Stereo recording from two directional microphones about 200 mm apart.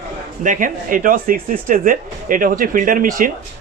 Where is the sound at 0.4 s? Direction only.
40° right (ahead or behind).